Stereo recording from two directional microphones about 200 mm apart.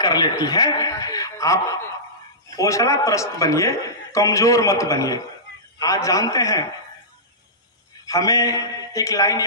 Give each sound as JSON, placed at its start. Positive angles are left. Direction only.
{"t": 0.0, "sound": "a man's voice", "side_deg": 20}
{"t": 8.0, "sound": "a man's voice", "side_deg": 15}